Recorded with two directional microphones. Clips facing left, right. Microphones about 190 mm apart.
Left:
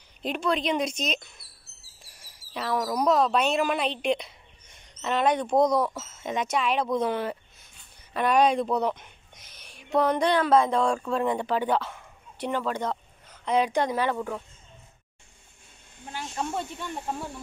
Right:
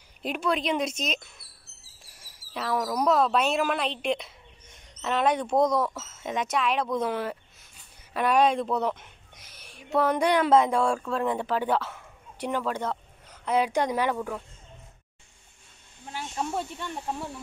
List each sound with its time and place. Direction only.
0.2 s speech: 5° right (ahead or behind)
2.5 s a woman's voice: centre (ahead or behind)
10.4 s speech: 20° right (ahead or behind)
10.7 s speech: 5° right (ahead or behind)
14.1 s speech: centre (ahead or behind)
16.1 s speech: 5° right (ahead or behind)